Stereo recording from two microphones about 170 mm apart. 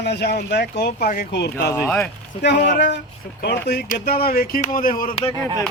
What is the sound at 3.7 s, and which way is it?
Speech, 65° left (ahead or behind).